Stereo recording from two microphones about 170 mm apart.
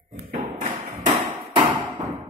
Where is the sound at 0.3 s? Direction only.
40° right (ahead or behind).